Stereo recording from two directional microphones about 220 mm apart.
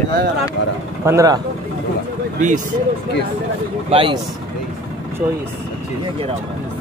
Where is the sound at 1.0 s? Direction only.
15° right (ahead or behind).